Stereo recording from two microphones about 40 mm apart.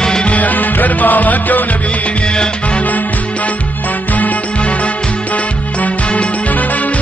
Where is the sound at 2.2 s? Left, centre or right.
Left.